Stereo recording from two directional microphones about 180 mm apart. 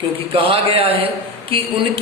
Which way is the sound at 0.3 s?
30° right (ahead or behind).